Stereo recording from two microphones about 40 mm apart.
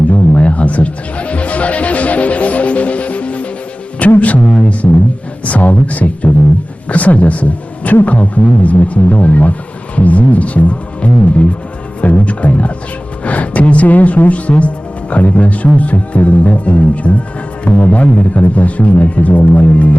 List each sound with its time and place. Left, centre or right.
0.3 s music: left
4.8 s music: left
5.5 s speech: left